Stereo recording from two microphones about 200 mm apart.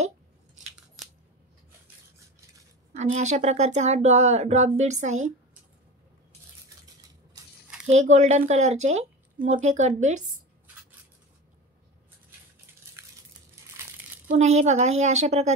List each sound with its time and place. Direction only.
3.2 s speech: 35° right (ahead or behind)
7.8 s speech: 35° right (ahead or behind)
13.0 s a sound: 15° right (ahead or behind)
14.2 s speech: 35° right (ahead or behind)